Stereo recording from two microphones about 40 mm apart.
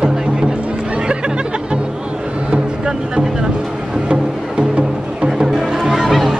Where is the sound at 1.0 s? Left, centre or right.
Right.